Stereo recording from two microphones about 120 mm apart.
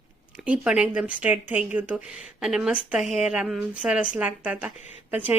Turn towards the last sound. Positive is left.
turn(degrees=-15)  # may be behind; listen again after turning